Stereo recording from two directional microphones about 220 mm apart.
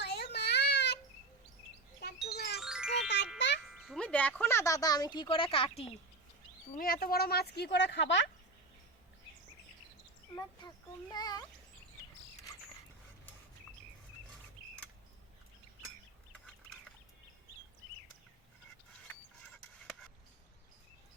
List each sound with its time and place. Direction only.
0.0 s a sound: 50° left (ahead or behind)
2.2 s music: 50° left (ahead or behind)
2.6 s music: 5° right (ahead or behind)
3.3 s music: 50° left (ahead or behind)
3.7 s speech: centre (ahead or behind); by 5.9 s 25° left (ahead or behind)
6.7 s speech: 40° left (ahead or behind)
11.1 s a child's voice: 20° left (ahead or behind)